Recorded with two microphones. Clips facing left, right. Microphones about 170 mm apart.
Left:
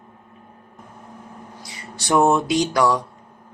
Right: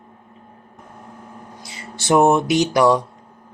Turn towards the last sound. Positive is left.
turn(degrees=-25)  # may be behind; listen again after turning